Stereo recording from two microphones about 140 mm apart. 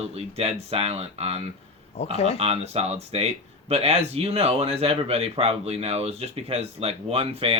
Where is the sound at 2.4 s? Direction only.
45° right (ahead or behind).